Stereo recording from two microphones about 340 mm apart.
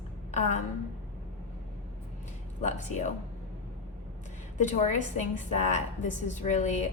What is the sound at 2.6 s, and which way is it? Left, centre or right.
Speech, left.